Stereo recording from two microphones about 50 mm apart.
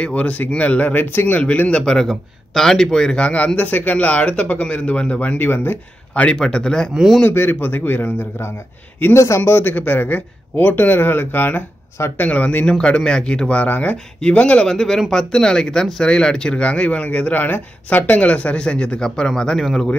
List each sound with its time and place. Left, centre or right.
0.0 s a man's voice: left
1.7 s speech: centre
2.0 s speech: centre; by 3.5 s left
3.5 s speech: left
5.4 s speech: left
6.1 s speech: left
6.4 s speech: centre
7.2 s a man's voice: left
9.1 s speech: left
9.4 s a man's voice: left
12.2 s a man's voice: left
14.7 s speech: centre; by 18.2 s left
18.2 s speech: left; by 19.9 s centre